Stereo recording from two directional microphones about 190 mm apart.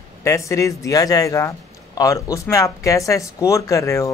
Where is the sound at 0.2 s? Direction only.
15° left (ahead or behind).